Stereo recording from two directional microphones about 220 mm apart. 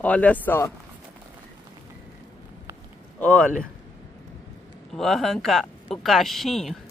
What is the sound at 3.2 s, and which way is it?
Speech, 5° left (ahead or behind).